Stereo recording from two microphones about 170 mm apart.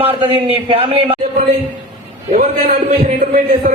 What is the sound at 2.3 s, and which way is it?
Speech, 55° right (ahead or behind).